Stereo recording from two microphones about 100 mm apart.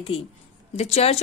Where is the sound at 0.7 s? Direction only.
90° left.